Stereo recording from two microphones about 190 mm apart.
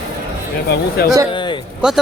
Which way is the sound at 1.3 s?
25° left (ahead or behind).